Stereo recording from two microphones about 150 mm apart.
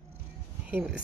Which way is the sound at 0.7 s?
5° right (ahead or behind).